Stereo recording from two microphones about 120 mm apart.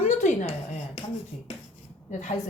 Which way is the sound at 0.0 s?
80° left.